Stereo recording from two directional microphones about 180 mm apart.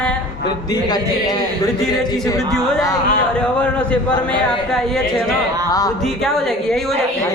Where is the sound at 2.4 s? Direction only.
5° left (ahead or behind).